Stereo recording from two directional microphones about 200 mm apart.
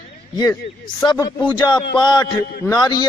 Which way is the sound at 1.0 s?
20° left (ahead or behind).